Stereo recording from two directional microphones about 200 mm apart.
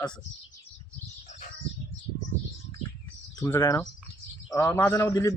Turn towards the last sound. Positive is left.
turn(degrees=15)  # may be behind; listen again after turning